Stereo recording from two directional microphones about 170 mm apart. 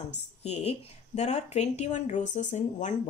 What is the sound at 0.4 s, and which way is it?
Speech, 40° left (ahead or behind).